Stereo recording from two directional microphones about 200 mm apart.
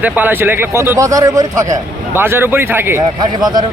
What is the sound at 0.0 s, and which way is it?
A man's voice, 10° right (ahead or behind).